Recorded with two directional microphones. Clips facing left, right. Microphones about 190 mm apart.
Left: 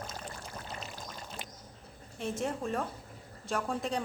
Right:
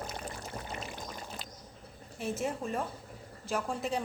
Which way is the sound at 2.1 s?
5° right (ahead or behind).